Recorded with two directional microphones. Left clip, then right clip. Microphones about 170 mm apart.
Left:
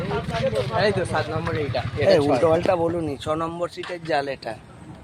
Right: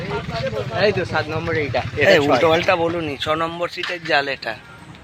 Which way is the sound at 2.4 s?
5° left (ahead or behind).